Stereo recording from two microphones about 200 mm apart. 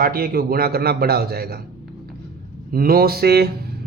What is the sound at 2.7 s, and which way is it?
Speech, 50° right (ahead or behind).